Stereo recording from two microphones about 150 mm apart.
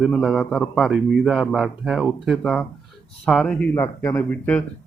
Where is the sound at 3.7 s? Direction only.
20° left (ahead or behind).